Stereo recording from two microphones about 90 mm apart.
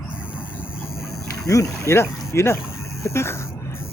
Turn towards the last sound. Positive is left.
turn(degrees=30)  # may be behind; listen again after turning